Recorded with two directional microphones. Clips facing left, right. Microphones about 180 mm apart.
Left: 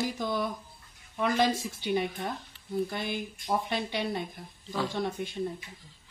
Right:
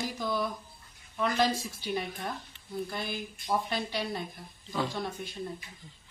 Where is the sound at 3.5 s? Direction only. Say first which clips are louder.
Left 1 dB; 20° left (ahead or behind).